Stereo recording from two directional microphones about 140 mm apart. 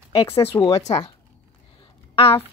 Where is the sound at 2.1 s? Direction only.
40° left (ahead or behind).